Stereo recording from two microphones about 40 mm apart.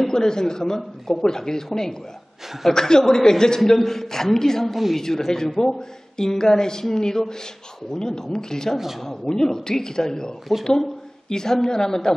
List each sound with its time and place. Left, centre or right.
0.0 s a man's voice: centre
8.7 s speech: centre
9.0 s a man's voice: centre